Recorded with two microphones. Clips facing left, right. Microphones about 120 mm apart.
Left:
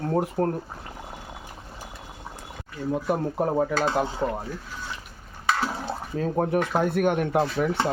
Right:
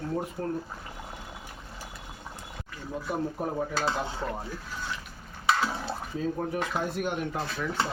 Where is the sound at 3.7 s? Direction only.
60° left (ahead or behind).